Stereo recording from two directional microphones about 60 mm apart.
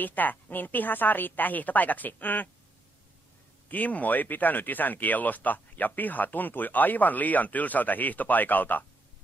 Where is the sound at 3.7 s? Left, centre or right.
Left.